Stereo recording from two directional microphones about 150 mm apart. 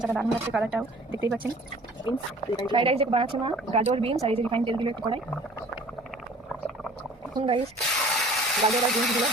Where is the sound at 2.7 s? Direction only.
35° right (ahead or behind).